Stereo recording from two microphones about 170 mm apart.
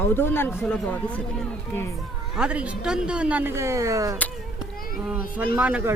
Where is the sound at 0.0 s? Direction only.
10° left (ahead or behind).